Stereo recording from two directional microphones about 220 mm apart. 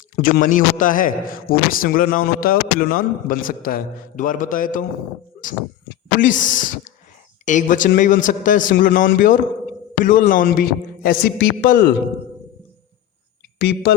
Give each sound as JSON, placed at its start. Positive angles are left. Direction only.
{"t": 0.2, "sound": "a man's voice", "side_deg": 40}
{"t": 6.1, "sound": "a man's voice", "side_deg": 35}
{"t": 13.6, "sound": "speech", "side_deg": 45}